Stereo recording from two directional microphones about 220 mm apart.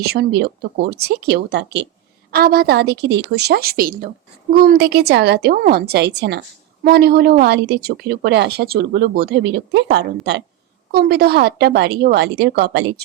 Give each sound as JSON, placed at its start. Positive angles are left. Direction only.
{"t": 0.0, "sound": "speech", "side_deg": -45}